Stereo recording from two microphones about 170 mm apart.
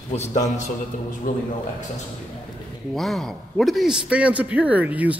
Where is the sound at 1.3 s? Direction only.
50° left (ahead or behind).